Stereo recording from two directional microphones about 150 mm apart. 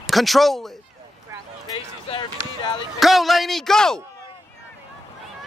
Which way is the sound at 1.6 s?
25° left (ahead or behind).